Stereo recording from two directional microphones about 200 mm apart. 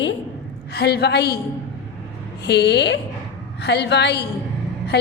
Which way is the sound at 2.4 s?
60° left (ahead or behind).